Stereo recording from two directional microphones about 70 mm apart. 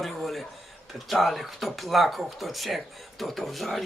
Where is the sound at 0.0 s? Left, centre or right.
Centre.